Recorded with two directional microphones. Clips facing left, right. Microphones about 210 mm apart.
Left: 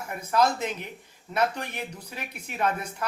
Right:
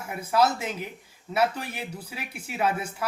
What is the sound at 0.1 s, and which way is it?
Speech, 10° right (ahead or behind).